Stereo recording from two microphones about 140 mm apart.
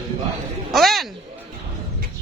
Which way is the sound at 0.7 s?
Centre (ahead or behind).